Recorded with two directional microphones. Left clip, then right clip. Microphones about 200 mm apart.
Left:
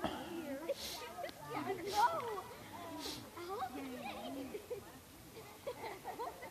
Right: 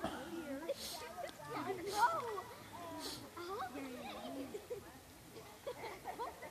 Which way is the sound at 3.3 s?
60° right (ahead or behind).